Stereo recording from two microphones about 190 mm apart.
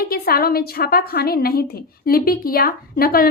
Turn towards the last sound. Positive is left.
turn(degrees=50)  # may be behind; listen again after turning